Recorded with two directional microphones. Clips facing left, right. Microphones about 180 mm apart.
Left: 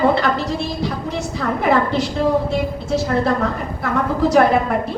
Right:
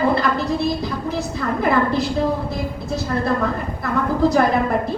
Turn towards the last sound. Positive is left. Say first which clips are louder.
# left 2 dB
turn(degrees=70)  # may be behind; listen again after turning